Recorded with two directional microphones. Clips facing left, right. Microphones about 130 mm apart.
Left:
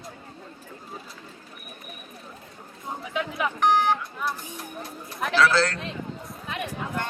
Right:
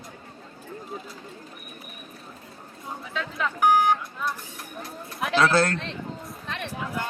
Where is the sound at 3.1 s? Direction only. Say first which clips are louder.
Left 2 dB; 15° left (ahead or behind).